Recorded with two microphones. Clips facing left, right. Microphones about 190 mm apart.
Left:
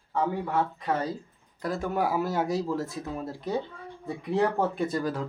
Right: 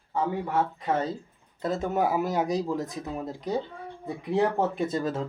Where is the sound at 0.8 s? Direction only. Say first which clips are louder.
Right 1 dB; 25° right (ahead or behind).